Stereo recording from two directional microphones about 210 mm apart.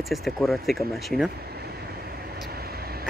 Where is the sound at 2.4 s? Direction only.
45° right (ahead or behind).